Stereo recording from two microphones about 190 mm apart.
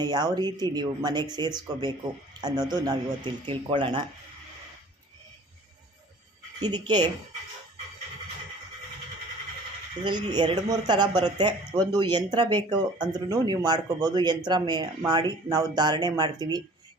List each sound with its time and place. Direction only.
0.0 s speech: 20° right (ahead or behind)
6.6 s speech: 20° right (ahead or behind)
10.0 s speech: 25° right (ahead or behind)